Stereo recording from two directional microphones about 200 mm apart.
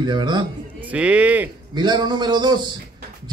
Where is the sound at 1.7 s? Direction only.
20° right (ahead or behind).